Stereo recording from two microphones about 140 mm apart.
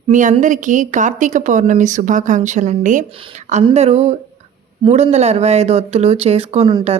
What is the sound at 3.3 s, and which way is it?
A woman's voice, 55° right (ahead or behind).